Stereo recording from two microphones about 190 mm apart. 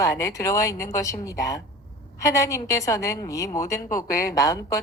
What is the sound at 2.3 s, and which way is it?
A woman's voice, 15° left (ahead or behind).